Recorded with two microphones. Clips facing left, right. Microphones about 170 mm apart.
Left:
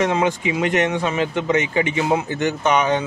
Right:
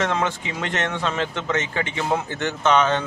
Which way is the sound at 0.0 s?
15° left (ahead or behind).